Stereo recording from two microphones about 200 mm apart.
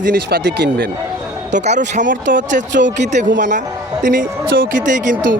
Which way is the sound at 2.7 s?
65° right (ahead or behind).